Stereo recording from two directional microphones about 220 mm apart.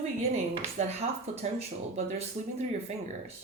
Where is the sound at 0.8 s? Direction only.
30° right (ahead or behind).